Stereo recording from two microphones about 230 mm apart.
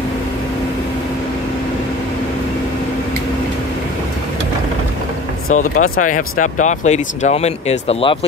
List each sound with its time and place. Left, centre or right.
5.5 s speech: left